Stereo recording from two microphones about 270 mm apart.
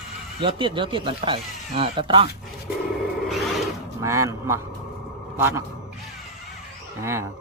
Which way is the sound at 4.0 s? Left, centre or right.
Centre.